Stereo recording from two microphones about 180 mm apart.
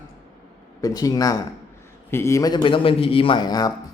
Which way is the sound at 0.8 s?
20° left (ahead or behind).